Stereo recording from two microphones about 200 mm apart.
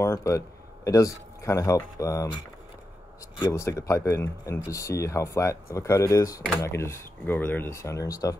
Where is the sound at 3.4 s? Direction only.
15° left (ahead or behind).